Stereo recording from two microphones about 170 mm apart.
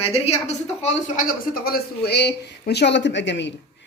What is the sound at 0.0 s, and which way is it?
A woman's voice, 35° left (ahead or behind).